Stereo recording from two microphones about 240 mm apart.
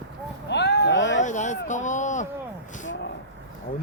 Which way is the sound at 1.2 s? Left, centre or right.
Left.